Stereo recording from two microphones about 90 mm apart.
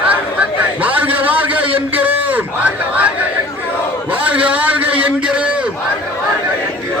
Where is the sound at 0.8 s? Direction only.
15° right (ahead or behind).